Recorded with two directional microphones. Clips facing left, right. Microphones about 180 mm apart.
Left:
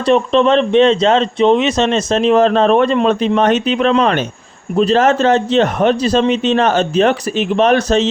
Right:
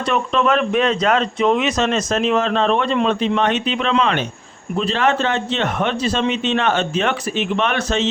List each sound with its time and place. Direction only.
0.1 s a man's voice: 30° left (ahead or behind)